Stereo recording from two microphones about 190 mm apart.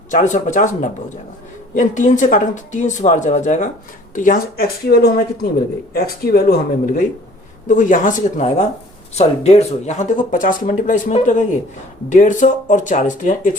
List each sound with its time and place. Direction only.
0.1 s speech: 40° left (ahead or behind)